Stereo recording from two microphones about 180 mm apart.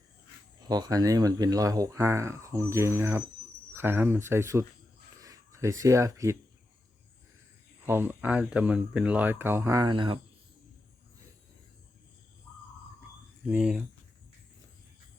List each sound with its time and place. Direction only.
0.6 s speech: 20° right (ahead or behind)
7.9 s speech: 10° right (ahead or behind)
13.4 s speech: 5° right (ahead or behind)